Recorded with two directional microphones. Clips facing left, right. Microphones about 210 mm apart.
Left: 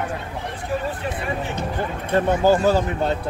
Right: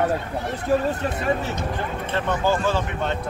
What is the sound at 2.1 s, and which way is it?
Speech, 40° left (ahead or behind).